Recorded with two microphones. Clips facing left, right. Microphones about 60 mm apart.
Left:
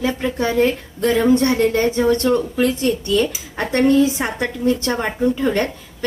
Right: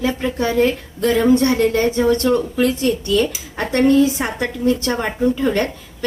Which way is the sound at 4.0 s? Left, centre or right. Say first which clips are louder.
Right 1 dB; left.